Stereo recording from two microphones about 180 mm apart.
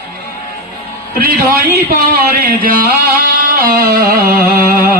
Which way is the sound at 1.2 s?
60° right (ahead or behind).